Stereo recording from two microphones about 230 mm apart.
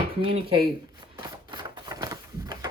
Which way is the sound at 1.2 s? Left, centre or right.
Centre.